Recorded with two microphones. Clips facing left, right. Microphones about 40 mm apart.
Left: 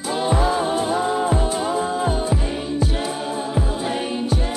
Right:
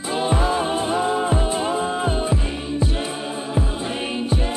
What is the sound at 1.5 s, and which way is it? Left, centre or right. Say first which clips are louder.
Music: even; right.